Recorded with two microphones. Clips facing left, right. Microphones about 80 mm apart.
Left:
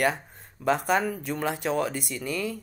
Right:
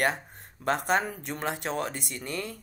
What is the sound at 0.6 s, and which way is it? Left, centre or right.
Speech, right.